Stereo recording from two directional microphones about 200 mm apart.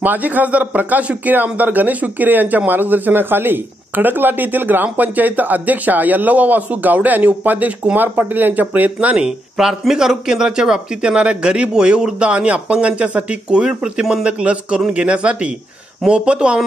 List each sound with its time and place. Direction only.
0.0 s a man's voice: 10° right (ahead or behind)